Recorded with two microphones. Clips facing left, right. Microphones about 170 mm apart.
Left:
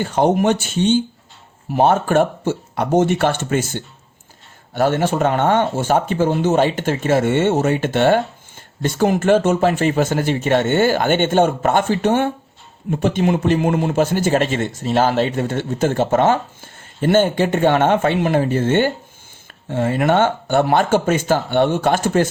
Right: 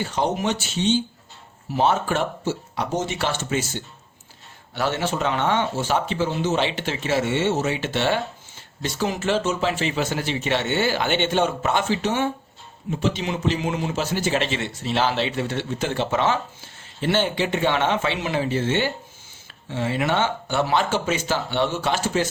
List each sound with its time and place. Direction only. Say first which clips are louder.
0.0 s speech: left 8 dB; 55° left (ahead or behind)